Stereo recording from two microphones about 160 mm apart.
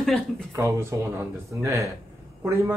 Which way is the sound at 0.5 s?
20° right (ahead or behind).